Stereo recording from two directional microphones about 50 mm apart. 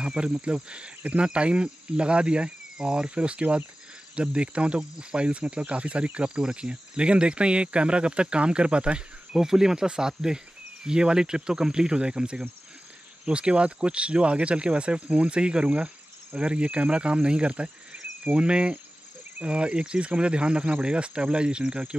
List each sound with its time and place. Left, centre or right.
0.0 s cricket: centre
10.9 s speech: centre
13.2 s cricket: right